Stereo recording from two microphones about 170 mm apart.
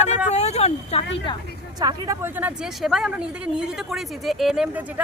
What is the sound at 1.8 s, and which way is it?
Speech, 20° right (ahead or behind).